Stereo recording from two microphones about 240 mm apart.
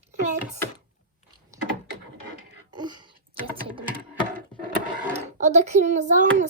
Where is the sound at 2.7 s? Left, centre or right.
Centre.